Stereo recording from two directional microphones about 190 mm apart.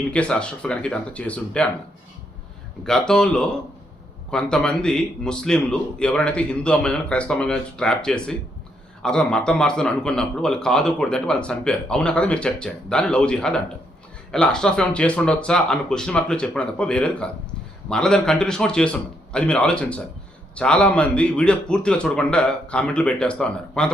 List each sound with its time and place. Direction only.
0.1 s a man's voice: 5° left (ahead or behind)
2.8 s a man's voice: 5° left (ahead or behind)